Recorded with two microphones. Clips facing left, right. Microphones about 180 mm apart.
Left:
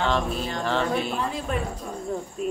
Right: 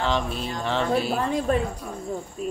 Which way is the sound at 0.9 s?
35° right (ahead or behind).